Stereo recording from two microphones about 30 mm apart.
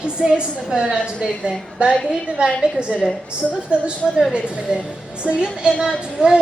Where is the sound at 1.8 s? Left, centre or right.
Right.